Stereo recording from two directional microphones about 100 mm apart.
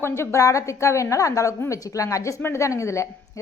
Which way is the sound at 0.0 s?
25° left (ahead or behind).